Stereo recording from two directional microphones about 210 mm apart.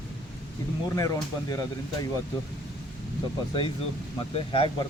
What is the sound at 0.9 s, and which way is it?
Speech, 15° left (ahead or behind).